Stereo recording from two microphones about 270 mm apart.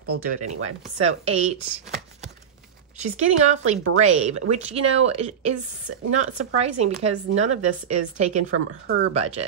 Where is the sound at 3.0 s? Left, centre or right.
Right.